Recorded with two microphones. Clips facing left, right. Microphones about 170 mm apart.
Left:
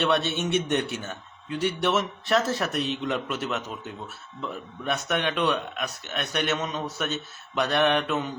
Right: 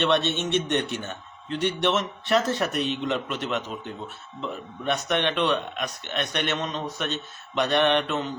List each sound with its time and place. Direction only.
0.0 s a man's voice: 5° left (ahead or behind)
7.0 s mantra: 5° left (ahead or behind)